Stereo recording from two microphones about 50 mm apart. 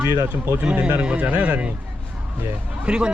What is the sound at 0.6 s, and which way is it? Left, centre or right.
Speech, right.